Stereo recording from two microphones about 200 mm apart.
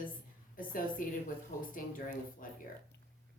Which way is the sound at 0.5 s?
45° left (ahead or behind).